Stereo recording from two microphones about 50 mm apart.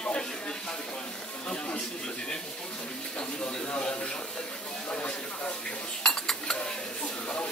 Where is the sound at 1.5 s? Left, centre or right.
Centre.